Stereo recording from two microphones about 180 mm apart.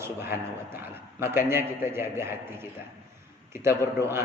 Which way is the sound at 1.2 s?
15° right (ahead or behind).